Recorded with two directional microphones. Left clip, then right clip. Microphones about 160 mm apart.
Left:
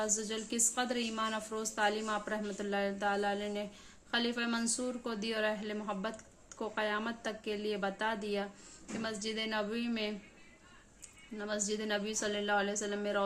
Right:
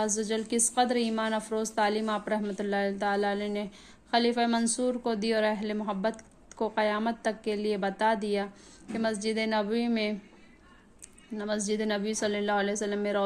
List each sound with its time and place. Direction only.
0.0 s a woman's voice: 40° right (ahead or behind)
11.3 s a woman's voice: 40° right (ahead or behind)